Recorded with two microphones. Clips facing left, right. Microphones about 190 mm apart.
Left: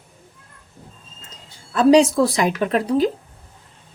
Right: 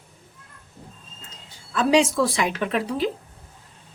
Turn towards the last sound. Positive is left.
turn(degrees=40)  # may be behind; listen again after turning